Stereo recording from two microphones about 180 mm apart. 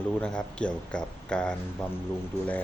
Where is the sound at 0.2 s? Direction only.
5° left (ahead or behind).